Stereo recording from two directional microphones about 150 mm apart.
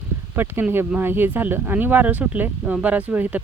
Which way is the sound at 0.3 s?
15° right (ahead or behind).